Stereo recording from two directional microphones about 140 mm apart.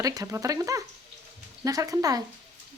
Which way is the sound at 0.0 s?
25° right (ahead or behind).